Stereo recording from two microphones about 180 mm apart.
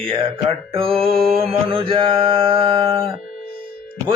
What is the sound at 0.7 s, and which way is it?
Mantra, 30° right (ahead or behind).